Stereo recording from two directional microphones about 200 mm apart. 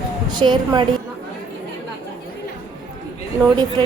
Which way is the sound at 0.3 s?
20° right (ahead or behind).